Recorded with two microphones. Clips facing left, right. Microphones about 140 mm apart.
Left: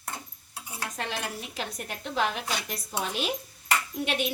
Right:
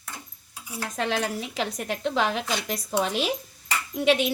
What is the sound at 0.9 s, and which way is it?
A woman's voice, 90° right.